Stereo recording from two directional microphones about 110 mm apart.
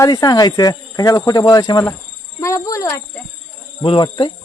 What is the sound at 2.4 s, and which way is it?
Cricket, 30° left (ahead or behind).